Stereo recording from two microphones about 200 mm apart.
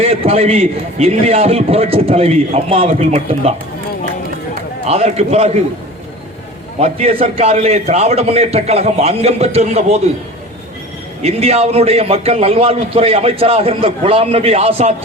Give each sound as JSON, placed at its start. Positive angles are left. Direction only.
{"t": 0.0, "sound": "a man's voice", "side_deg": -30}
{"t": 4.9, "sound": "a man's voice", "side_deg": -30}
{"t": 6.7, "sound": "a man's voice", "side_deg": -30}
{"t": 11.2, "sound": "a man's voice", "side_deg": -30}